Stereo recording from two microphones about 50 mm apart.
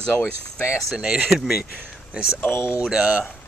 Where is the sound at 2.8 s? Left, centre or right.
Centre.